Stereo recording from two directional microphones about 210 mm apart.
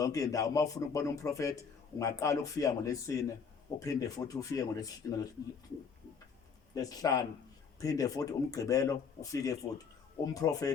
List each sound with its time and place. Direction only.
0.0 s a man's voice: 15° left (ahead or behind)
6.7 s a man's voice: 15° left (ahead or behind)